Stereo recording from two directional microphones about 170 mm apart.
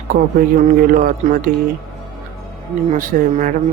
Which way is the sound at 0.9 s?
55° right (ahead or behind).